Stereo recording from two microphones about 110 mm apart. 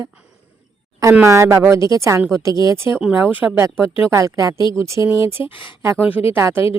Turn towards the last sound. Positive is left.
turn(degrees=-20)  # may be behind; listen again after turning